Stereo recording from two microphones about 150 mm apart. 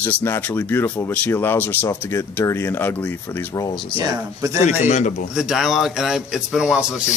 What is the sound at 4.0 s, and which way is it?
Speech, 20° right (ahead or behind).